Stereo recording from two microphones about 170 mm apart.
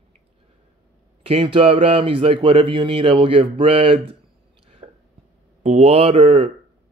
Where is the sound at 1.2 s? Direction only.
30° right (ahead or behind).